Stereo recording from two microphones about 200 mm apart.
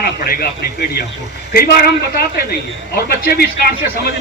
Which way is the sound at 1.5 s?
50° left (ahead or behind).